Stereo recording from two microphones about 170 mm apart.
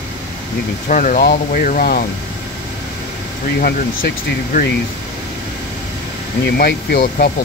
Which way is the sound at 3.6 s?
60° left (ahead or behind).